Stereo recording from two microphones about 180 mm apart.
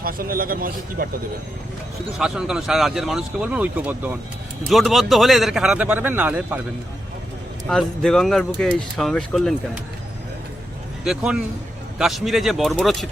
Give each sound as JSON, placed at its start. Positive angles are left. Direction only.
{"t": 0.0, "sound": "speech", "side_deg": -50}
{"t": 2.1, "sound": "speech", "side_deg": -5}
{"t": 7.7, "sound": "speech", "side_deg": 5}
{"t": 11.0, "sound": "speech", "side_deg": -5}